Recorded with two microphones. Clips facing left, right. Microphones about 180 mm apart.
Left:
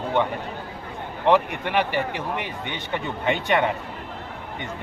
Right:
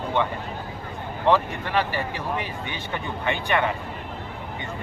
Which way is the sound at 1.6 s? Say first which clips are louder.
Left 2 dB; 20° left (ahead or behind).